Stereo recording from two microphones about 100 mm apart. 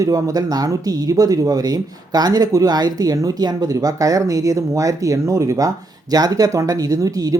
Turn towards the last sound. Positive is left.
turn(degrees=-35)  # may be behind; listen again after turning